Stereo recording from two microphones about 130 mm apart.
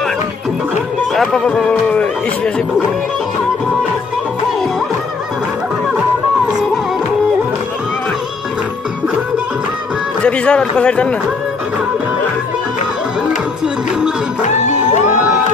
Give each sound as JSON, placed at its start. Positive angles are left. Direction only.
{"t": 1.1, "sound": "speech", "side_deg": 5}
{"t": 10.2, "sound": "speech", "side_deg": 10}
{"t": 14.4, "sound": "music", "side_deg": 65}